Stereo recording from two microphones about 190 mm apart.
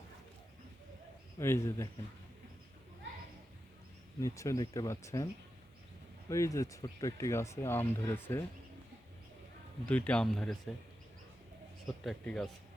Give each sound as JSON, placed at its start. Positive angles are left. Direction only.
{"t": 1.4, "sound": "speech", "side_deg": 15}
{"t": 4.2, "sound": "speech", "side_deg": 15}
{"t": 9.8, "sound": "speech", "side_deg": 5}
{"t": 12.0, "sound": "speech", "side_deg": 5}